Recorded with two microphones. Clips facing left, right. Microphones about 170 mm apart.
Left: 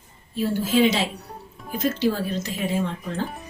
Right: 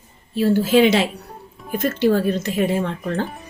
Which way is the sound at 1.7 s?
55° right (ahead or behind).